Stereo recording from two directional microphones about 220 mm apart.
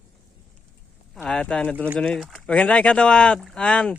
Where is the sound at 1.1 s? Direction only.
5° left (ahead or behind).